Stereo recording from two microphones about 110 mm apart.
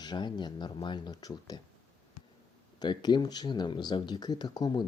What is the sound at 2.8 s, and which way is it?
Speech, 40° left (ahead or behind).